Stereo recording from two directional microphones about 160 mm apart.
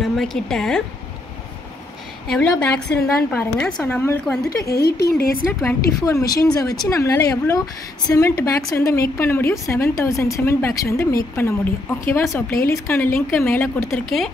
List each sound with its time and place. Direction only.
0.0 s speech: centre (ahead or behind)
2.2 s a woman's voice: 5° left (ahead or behind)
4.5 s speech: 75° left (ahead or behind)
5.6 s a woman's voice: 20° left (ahead or behind)